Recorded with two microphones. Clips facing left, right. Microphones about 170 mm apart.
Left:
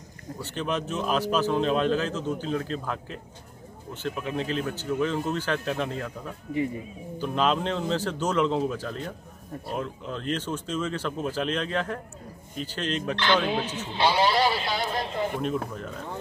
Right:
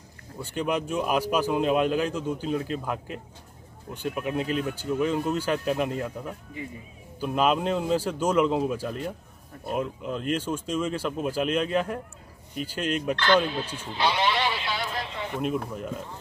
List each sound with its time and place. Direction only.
0.4 s a man's voice: 10° right (ahead or behind)
13.9 s sheep: 30° left (ahead or behind)
15.4 s a man's voice: 10° right (ahead or behind)